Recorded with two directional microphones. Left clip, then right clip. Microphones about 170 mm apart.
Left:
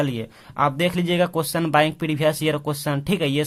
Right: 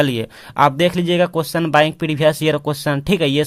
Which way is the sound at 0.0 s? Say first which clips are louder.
Right 7 dB; 30° right (ahead or behind).